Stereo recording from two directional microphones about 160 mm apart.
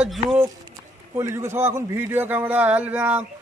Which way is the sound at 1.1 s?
15° right (ahead or behind).